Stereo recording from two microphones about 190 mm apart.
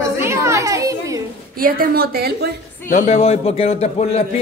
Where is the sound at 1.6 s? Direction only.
50° right (ahead or behind).